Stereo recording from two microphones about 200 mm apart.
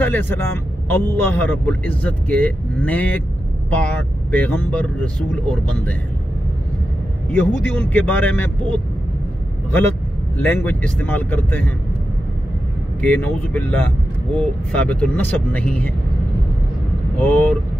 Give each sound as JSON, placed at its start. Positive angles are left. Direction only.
{"t": 0.0, "sound": "speech", "side_deg": 10}
{"t": 7.3, "sound": "speech", "side_deg": 10}
{"t": 10.3, "sound": "speech", "side_deg": 10}
{"t": 13.0, "sound": "speech", "side_deg": 10}
{"t": 17.2, "sound": "speech", "side_deg": 10}